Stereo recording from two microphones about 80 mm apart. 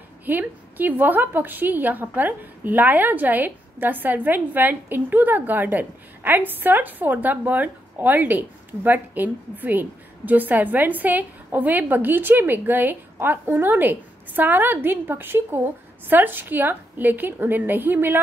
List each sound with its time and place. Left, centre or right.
0.2 s a woman's voice: right